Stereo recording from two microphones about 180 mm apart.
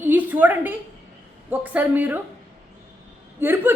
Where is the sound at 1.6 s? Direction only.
10° right (ahead or behind).